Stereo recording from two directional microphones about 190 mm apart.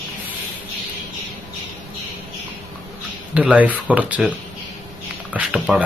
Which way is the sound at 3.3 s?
5° right (ahead or behind).